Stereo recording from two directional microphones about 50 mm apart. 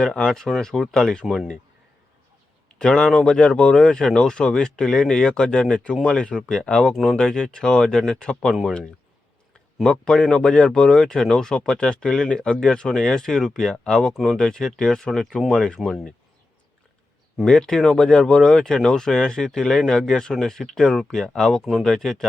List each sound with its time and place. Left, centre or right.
0.0 s speech: centre
2.6 s a sound: centre
3.2 s speech: centre
6.9 s speech: centre
7.2 s speech: centre
8.4 s speech: centre
9.8 s speech: centre
17.4 s speech: centre
21.6 s speech: centre
21.8 s speech: centre